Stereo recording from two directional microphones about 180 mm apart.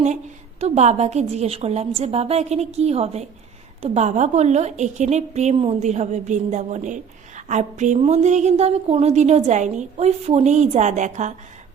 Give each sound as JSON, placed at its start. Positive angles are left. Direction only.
{"t": 0.6, "sound": "a woman's voice", "side_deg": -40}